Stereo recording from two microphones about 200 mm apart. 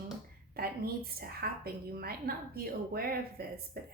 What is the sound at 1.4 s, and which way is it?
A woman's voice, 50° right (ahead or behind).